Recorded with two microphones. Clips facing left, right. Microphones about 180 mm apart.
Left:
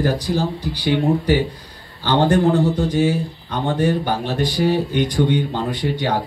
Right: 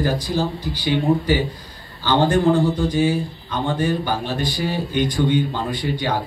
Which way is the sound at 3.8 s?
65° left (ahead or behind).